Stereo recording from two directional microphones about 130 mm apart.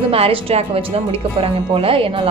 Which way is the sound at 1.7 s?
45° right (ahead or behind).